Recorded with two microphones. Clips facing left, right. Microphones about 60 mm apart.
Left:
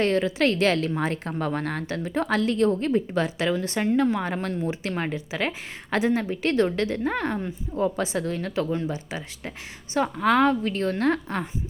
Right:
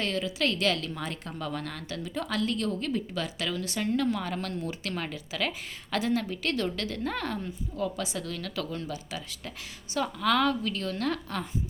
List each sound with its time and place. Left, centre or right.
0.0 s a woman's voice: left